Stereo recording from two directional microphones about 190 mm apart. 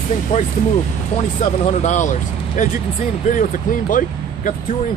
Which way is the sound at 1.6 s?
40° left (ahead or behind).